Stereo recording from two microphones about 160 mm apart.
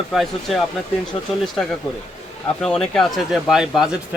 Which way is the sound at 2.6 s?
5° left (ahead or behind).